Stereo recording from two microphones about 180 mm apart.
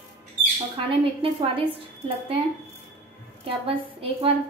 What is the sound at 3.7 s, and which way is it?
Speech, 30° right (ahead or behind).